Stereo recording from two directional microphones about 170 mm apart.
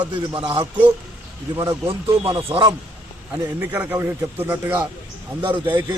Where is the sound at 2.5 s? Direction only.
25° right (ahead or behind).